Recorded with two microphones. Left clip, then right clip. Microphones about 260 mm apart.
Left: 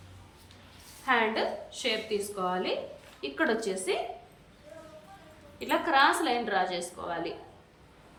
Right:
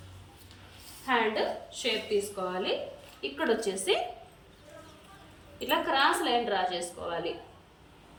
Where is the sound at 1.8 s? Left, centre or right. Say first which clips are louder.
Even; centre.